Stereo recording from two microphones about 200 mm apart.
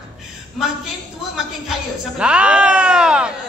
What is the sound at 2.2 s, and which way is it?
Speech, 5° right (ahead or behind).